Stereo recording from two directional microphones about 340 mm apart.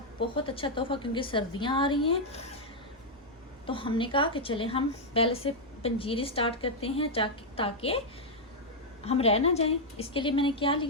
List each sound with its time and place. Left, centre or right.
0.2 s a woman's voice: centre
3.7 s a woman's voice: centre
9.0 s a woman's voice: centre